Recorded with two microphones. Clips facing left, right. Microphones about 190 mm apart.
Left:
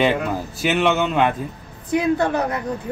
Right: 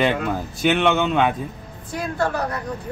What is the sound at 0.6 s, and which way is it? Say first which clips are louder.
Speech: even; 5° left (ahead or behind).